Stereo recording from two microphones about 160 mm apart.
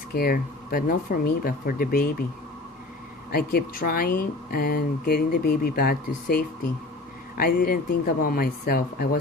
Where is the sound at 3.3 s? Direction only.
70° left (ahead or behind).